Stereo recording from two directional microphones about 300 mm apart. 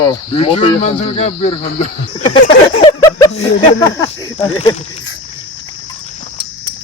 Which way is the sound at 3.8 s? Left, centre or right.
Centre.